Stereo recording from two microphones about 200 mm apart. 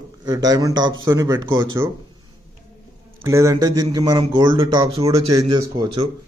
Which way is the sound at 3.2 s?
15° right (ahead or behind).